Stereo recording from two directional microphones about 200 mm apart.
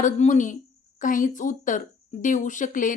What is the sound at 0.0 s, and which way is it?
A woman's voice, 40° left (ahead or behind).